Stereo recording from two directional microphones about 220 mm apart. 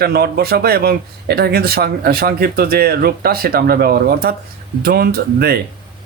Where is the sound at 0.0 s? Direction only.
45° right (ahead or behind).